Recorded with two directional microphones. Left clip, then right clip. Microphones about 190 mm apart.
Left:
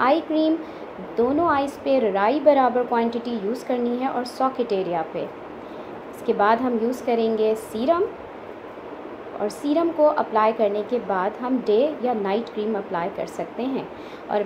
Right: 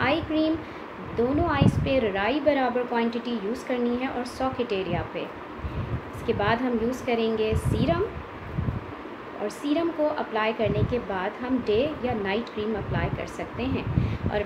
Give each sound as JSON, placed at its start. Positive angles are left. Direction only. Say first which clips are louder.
{"t": 0.0, "sound": "a child's voice", "louder": "left 5 dB", "side_deg": 15}
{"t": 6.2, "sound": "a woman's voice", "louder": "left 6 dB", "side_deg": 15}
{"t": 9.6, "sound": "a woman's voice", "louder": "left 6 dB", "side_deg": 15}